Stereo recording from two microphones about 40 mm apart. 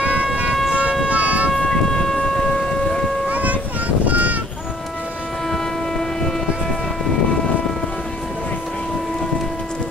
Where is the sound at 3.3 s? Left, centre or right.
Right.